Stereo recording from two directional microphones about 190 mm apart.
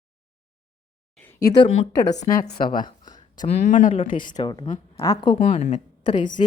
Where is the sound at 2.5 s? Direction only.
50° left (ahead or behind).